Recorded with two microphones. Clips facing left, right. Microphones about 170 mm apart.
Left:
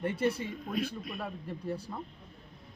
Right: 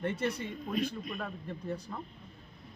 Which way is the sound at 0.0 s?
10° left (ahead or behind).